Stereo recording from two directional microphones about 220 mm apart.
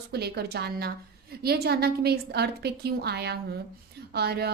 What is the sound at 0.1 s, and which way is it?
A woman's voice, 45° right (ahead or behind).